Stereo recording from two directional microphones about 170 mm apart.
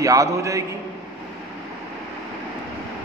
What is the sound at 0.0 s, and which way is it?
Speech, 20° right (ahead or behind).